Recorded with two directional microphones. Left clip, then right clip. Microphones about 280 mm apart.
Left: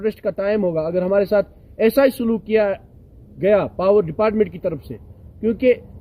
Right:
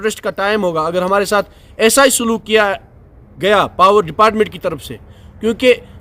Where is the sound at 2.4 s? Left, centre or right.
Right.